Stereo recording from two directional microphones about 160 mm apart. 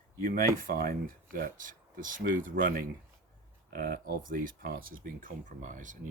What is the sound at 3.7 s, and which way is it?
Speech, 75° right (ahead or behind).